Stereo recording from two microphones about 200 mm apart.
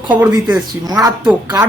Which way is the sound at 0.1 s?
15° right (ahead or behind).